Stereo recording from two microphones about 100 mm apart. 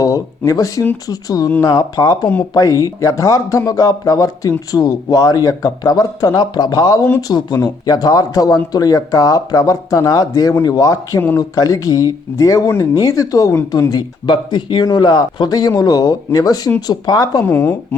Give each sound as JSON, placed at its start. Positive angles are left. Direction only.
{"t": 0.0, "sound": "speech", "side_deg": 35}
{"t": 17.4, "sound": "speech", "side_deg": 20}